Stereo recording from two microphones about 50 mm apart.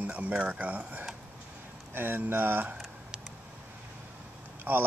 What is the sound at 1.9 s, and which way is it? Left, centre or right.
Speech, right.